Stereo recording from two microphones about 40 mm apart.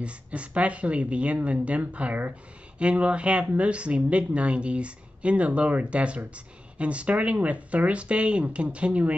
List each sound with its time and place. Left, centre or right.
0.0 s speech: right